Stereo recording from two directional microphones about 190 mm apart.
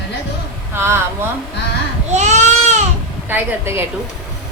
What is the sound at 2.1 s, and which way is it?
Baby cry, 40° right (ahead or behind).